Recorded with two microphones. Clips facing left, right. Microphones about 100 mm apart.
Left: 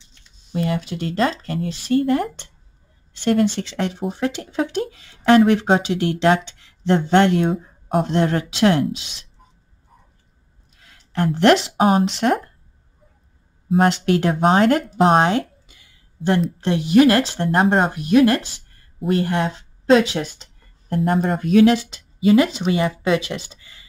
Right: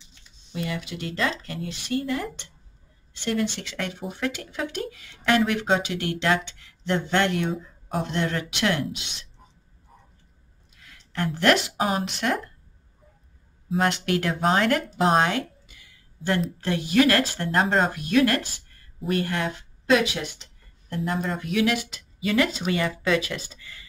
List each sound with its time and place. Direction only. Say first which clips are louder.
0.5 s speech: left 8 dB; 40° left (ahead or behind)
3.6 s speech: left 7 dB; 30° left (ahead or behind)
7.6 s a sound: left 8 dB; 45° left (ahead or behind)
8.1 s speech: left 7 dB; 35° left (ahead or behind)
10.8 s a sound: left 6 dB; 30° left (ahead or behind)
11.3 s speech: left 6 dB; 30° left (ahead or behind)
13.7 s speech: left 7 dB; 30° left (ahead or behind)
15.3 s a sound: left 7 dB; 25° left (ahead or behind)
16.6 s speech: left 7 dB; 20° left (ahead or behind)
20.9 s speech: left 8 dB; 50° left (ahead or behind); by 23.9 s 20° left (ahead or behind)